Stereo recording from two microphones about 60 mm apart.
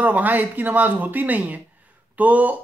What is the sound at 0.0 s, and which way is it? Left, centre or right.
Speech, right.